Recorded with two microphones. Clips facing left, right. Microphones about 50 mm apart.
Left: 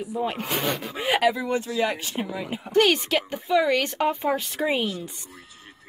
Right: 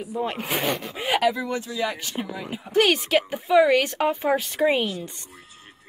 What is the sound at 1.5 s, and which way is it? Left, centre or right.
Speech, left.